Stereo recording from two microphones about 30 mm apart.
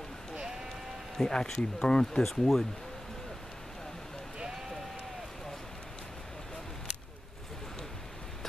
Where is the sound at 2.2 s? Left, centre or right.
Centre.